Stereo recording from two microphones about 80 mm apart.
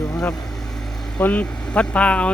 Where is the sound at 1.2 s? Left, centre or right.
Centre.